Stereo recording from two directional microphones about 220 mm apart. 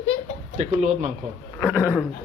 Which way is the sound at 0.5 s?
35° right (ahead or behind).